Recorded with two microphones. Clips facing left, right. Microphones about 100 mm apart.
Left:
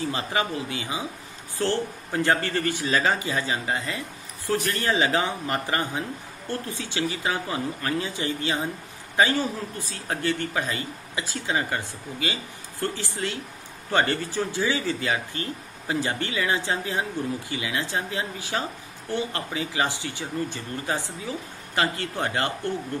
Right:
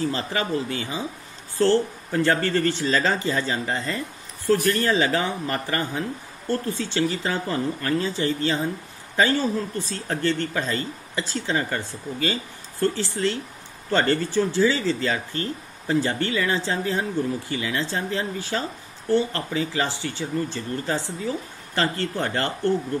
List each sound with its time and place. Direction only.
0.1 s speech: 15° left (ahead or behind)